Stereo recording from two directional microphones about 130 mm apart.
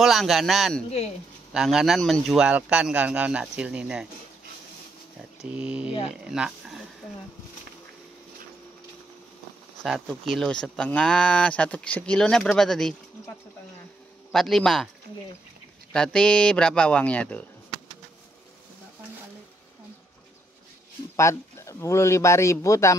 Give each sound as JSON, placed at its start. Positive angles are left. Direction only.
{"t": 0.0, "sound": "a man's voice", "side_deg": 0}
{"t": 0.8, "sound": "speech", "side_deg": 55}
{"t": 1.5, "sound": "a man's voice", "side_deg": -5}
{"t": 5.4, "sound": "a man's voice", "side_deg": -10}
{"t": 9.8, "sound": "speech", "side_deg": 0}
{"t": 14.3, "sound": "a man's voice", "side_deg": 0}
{"t": 15.9, "sound": "speech", "side_deg": 5}
{"t": 21.2, "sound": "a man's voice", "side_deg": 20}